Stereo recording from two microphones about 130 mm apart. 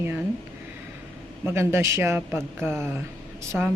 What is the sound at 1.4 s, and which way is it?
Speech, 20° right (ahead or behind).